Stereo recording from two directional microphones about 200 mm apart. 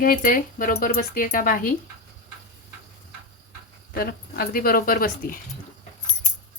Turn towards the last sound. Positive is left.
turn(degrees=45)  # may be behind; listen again after turning